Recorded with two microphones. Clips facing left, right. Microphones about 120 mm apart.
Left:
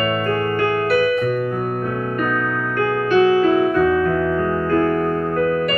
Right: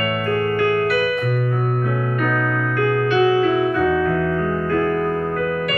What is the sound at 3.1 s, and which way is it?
Music, 40° left (ahead or behind).